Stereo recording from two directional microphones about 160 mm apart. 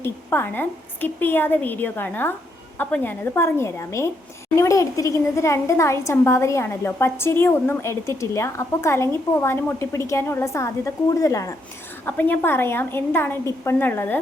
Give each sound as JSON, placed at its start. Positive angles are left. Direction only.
{"t": 0.0, "sound": "a woman's voice", "side_deg": 15}